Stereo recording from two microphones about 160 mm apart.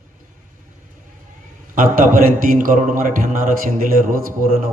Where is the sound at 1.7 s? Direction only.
60° right (ahead or behind).